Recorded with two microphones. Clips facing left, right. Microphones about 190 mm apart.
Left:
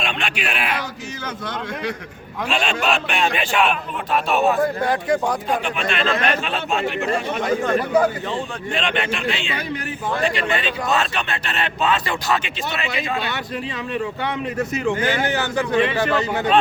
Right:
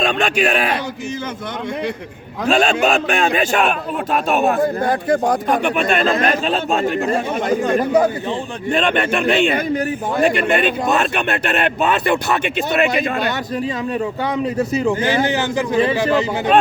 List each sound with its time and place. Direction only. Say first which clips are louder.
0.0 s a man's voice: right 9 dB; 45° right (ahead or behind)
2.5 s a man's voice: right 7 dB; 45° right (ahead or behind)
5.0 s a man's voice: right 6 dB; 35° right (ahead or behind)
5.5 s a man's voice: right 6 dB; 50° right (ahead or behind)
8.7 s a man's voice: right 7 dB; 50° right (ahead or behind)
12.6 s a man's voice: right 8 dB; 45° right (ahead or behind)